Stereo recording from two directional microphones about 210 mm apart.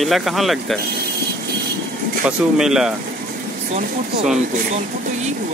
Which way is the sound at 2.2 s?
5° right (ahead or behind).